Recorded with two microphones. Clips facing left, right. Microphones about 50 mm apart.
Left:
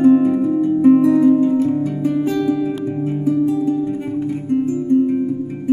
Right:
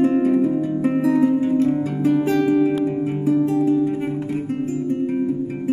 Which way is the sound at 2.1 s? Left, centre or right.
Centre.